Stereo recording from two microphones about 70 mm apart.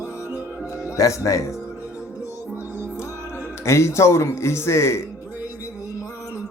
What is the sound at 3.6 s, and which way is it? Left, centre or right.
A man's voice, left.